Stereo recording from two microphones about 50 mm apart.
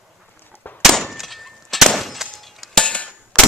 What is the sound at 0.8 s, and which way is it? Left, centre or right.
Clang, centre.